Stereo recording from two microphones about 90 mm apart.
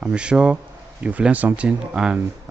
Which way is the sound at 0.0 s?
10° right (ahead or behind).